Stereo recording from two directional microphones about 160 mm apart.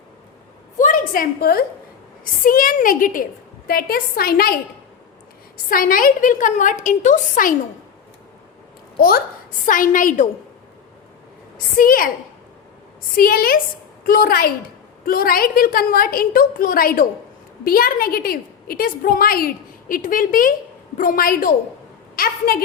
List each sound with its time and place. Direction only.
0.8 s a woman's voice: 55° left (ahead or behind)
5.6 s a woman's voice: 65° left (ahead or behind)
9.0 s a woman's voice: 70° left (ahead or behind)
9.6 s a woman's voice: 55° left (ahead or behind)
11.5 s a woman's voice: 60° left (ahead or behind)
13.1 s a woman's voice: 65° left (ahead or behind)